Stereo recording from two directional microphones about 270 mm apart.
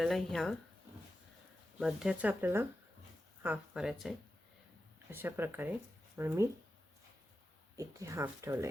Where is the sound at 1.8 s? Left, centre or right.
Centre.